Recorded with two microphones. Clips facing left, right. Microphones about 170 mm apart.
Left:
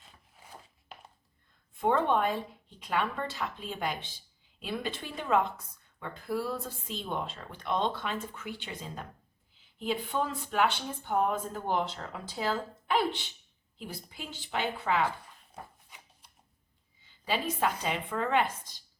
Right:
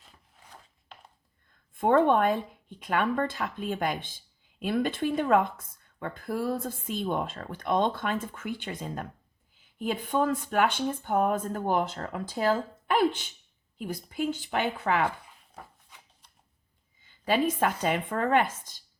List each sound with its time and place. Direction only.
0.9 s a sound: 5° left (ahead or behind)
1.7 s speech: 50° right (ahead or behind)
17.0 s speech: 50° right (ahead or behind)